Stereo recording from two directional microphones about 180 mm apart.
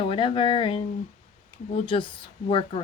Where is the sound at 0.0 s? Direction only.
30° left (ahead or behind).